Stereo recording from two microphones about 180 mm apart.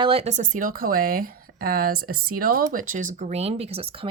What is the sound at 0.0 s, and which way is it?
Speech, 35° right (ahead or behind).